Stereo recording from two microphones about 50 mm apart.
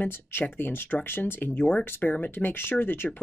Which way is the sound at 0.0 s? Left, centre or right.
Left.